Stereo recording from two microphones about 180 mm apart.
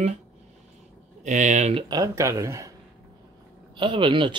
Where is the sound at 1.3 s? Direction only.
40° right (ahead or behind).